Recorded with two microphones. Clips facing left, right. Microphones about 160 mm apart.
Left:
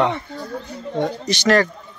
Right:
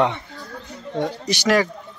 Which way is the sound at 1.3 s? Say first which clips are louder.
Left 2 dB; 10° right (ahead or behind).